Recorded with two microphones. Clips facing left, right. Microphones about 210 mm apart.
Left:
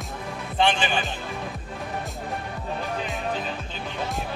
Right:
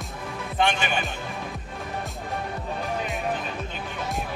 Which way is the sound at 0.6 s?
30° left (ahead or behind).